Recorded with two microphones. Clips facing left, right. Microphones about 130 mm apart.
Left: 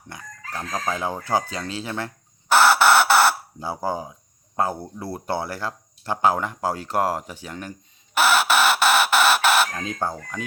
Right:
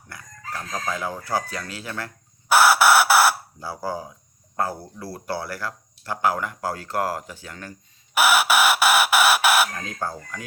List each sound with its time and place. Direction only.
0.1 s chicken: 20° left (ahead or behind)
2.5 s chicken: 10° right (ahead or behind)
3.6 s speech: 20° left (ahead or behind)
8.1 s chicken: 10° right (ahead or behind)
10.0 s speech: 20° left (ahead or behind)